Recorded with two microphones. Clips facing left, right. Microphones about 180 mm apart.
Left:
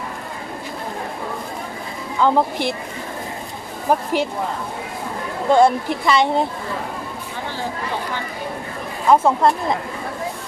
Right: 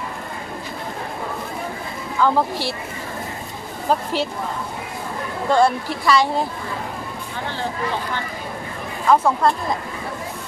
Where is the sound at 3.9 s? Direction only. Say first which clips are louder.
Left 2 dB; 15° left (ahead or behind).